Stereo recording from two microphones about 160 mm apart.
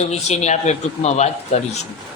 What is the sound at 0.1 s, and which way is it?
A man's voice, 45° left (ahead or behind).